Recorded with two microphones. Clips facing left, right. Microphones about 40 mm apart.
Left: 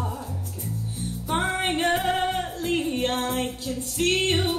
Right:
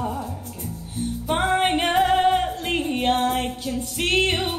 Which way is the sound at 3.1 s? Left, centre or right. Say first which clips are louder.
Right 4 dB; right.